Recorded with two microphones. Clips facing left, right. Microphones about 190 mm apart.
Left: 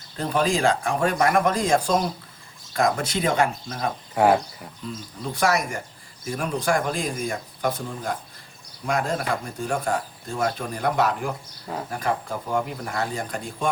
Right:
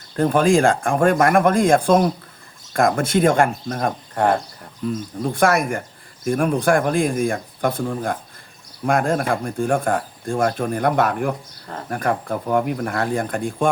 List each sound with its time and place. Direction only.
0.2 s speech: 50° right (ahead or behind)
4.1 s speech: 5° left (ahead or behind)
4.9 s speech: 50° right (ahead or behind)